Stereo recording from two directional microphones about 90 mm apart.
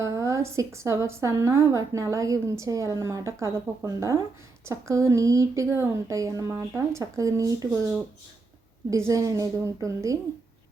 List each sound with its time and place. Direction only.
0.0 s a woman's voice: 35° right (ahead or behind)
8.9 s a woman's voice: 35° right (ahead or behind)